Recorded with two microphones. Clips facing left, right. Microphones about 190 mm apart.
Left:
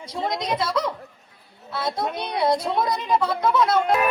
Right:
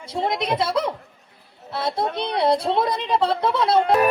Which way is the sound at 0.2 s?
25° right (ahead or behind).